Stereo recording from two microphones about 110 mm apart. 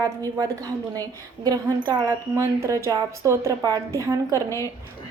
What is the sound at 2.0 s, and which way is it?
A woman's voice, 25° right (ahead or behind).